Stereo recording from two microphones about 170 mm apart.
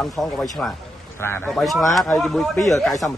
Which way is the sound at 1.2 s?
15° left (ahead or behind).